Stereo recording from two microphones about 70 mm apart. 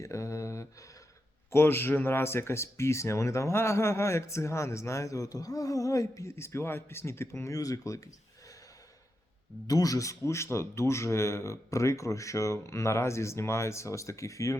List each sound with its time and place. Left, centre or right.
0.0 s speech: left
1.5 s speech: left
6.3 s speech: left
9.6 s speech: left